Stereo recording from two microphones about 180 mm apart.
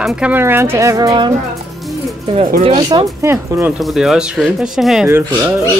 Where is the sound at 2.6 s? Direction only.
25° right (ahead or behind).